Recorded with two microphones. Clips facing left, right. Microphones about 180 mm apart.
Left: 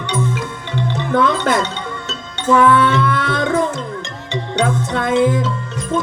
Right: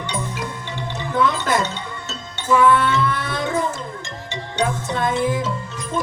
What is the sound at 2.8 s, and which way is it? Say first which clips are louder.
Music: left 4 dB; 60° left (ahead or behind).